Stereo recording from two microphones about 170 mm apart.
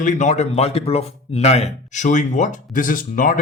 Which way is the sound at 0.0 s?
50° left (ahead or behind).